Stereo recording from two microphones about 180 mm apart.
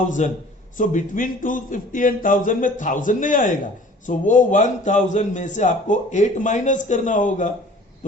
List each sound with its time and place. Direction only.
0.2 s a man's voice: 40° left (ahead or behind)